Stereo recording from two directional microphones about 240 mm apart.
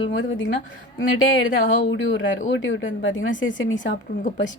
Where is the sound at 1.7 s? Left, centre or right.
Left.